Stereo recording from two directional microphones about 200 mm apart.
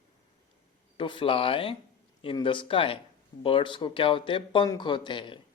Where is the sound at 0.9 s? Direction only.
25° left (ahead or behind).